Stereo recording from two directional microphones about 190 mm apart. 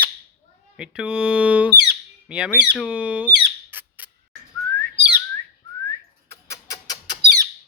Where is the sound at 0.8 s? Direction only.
5° right (ahead or behind).